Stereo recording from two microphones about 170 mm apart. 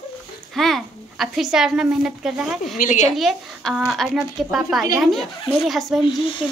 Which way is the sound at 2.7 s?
50° left (ahead or behind).